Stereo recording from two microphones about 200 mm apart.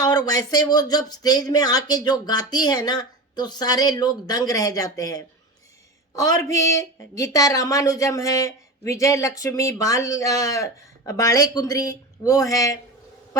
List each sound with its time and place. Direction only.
0.0 s speech: 20° left (ahead or behind)
6.5 s speech: 15° left (ahead or behind)